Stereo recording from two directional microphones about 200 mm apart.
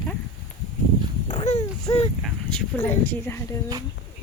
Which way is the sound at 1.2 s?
30° left (ahead or behind).